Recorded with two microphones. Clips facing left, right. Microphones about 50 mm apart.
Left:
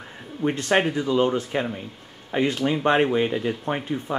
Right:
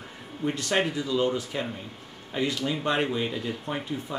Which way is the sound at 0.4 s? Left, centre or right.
Left.